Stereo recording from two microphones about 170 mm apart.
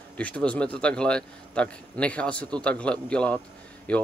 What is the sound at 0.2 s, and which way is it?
Speech, 5° left (ahead or behind).